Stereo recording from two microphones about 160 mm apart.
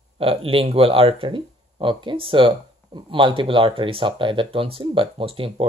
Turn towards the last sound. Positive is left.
turn(degrees=-35)  # may be behind; listen again after turning